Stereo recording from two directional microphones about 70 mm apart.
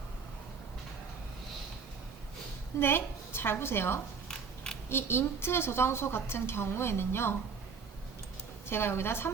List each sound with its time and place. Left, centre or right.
2.7 s a woman's voice: left
4.3 s a sound: centre
4.9 s a woman's voice: left
8.7 s a woman's voice: left